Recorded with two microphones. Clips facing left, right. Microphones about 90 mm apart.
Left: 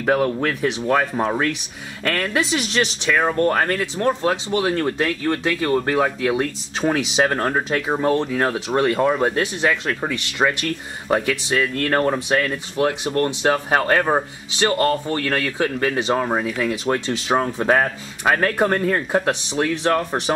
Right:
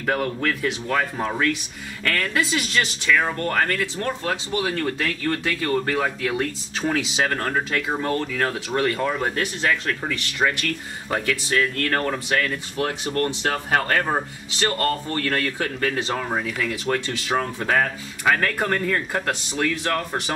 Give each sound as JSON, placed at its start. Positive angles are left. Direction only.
{"t": 0.0, "sound": "speech", "side_deg": 20}
{"t": 3.1, "sound": "speech", "side_deg": 30}